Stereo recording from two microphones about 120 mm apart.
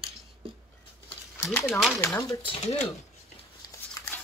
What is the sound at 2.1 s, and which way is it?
Speech, 25° left (ahead or behind).